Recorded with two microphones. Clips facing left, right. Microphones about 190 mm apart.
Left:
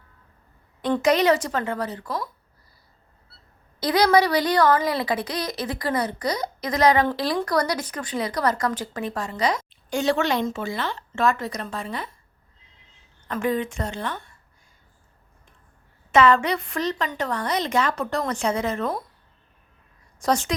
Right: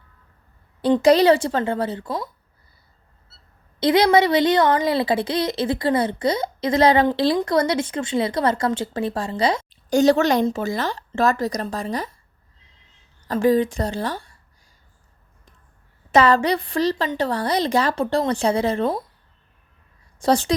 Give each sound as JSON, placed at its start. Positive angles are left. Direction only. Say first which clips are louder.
{"t": 1.0, "sound": "speech", "louder": "right 5 dB", "side_deg": -30}
{"t": 3.8, "sound": "a woman's voice", "louder": "right 3 dB", "side_deg": -25}
{"t": 13.2, "sound": "a woman's voice", "louder": "right 7 dB", "side_deg": -35}
{"t": 16.1, "sound": "a woman's voice", "louder": "right 2 dB", "side_deg": -35}
{"t": 20.1, "sound": "a woman's voice", "louder": "right 4 dB", "side_deg": -30}